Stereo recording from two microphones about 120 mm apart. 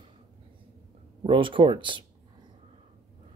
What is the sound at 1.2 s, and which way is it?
Speech, 45° right (ahead or behind).